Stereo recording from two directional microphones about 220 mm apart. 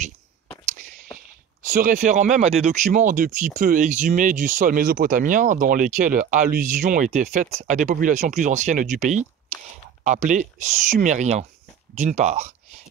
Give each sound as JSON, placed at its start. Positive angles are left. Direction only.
{"t": 1.6, "sound": "speech", "side_deg": -35}